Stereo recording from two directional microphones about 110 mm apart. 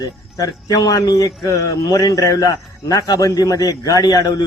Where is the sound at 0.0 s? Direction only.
35° left (ahead or behind).